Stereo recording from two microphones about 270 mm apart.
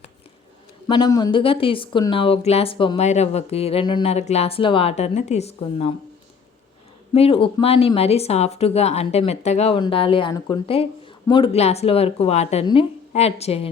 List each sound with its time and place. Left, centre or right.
0.9 s speech: centre
7.1 s speech: left